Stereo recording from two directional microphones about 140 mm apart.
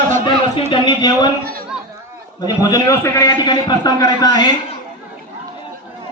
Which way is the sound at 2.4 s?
25° left (ahead or behind).